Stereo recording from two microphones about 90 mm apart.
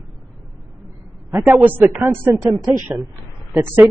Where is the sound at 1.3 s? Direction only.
25° right (ahead or behind).